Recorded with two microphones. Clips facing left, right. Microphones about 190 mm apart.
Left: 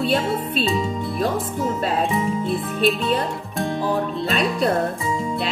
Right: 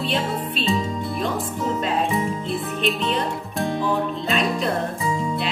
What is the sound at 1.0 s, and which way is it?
Music, centre (ahead or behind).